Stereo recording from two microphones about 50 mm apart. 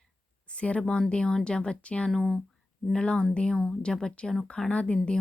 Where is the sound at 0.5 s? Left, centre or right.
Left.